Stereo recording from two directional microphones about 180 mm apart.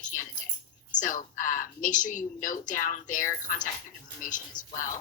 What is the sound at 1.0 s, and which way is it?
Speech, 45° left (ahead or behind).